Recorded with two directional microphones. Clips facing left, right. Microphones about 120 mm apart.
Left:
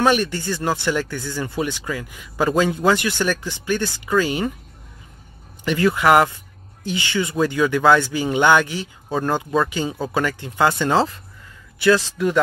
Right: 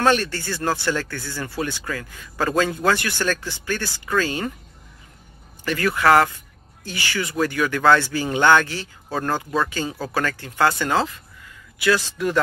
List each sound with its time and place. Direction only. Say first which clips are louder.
0.0 s speech: left 1 dB; 15° left (ahead or behind)
5.7 s speech: left 2 dB; 20° left (ahead or behind)